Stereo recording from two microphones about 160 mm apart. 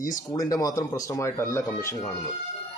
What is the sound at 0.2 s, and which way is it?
Speech, 20° left (ahead or behind).